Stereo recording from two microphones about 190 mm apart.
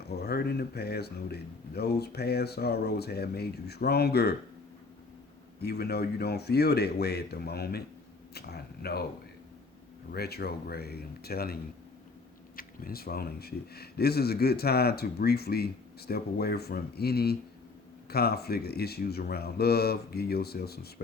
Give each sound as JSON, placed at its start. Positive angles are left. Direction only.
{"t": 0.2, "sound": "speech", "side_deg": 55}
{"t": 5.6, "sound": "speech", "side_deg": 55}
{"t": 10.1, "sound": "speech", "side_deg": 55}
{"t": 12.5, "sound": "speech", "side_deg": 50}